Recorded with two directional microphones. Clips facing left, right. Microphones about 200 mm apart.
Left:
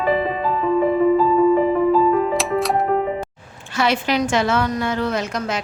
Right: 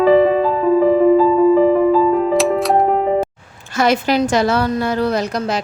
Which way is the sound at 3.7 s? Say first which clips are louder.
Right 4 dB; 45° right (ahead or behind).